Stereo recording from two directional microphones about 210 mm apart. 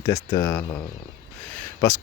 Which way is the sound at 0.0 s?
15° left (ahead or behind).